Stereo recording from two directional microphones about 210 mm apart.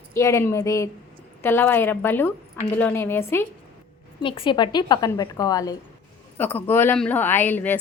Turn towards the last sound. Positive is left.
turn(degrees=10)  # may be behind; listen again after turning